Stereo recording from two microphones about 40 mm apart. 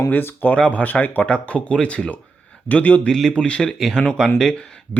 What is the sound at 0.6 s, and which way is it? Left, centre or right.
Speech, left.